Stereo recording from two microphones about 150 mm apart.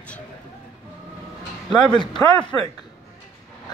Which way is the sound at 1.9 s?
30° left (ahead or behind).